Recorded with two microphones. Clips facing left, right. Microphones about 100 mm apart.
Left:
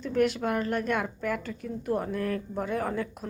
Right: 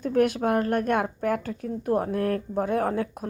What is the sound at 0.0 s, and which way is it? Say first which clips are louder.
A woman's voice: right 3 dB; 50° right (ahead or behind).